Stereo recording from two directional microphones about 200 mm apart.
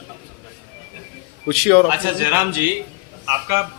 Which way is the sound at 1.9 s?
10° right (ahead or behind).